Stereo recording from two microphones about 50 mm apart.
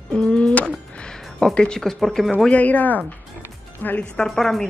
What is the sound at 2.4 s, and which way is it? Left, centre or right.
Speech, left.